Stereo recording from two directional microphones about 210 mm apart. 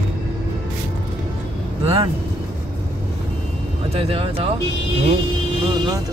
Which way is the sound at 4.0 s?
25° right (ahead or behind).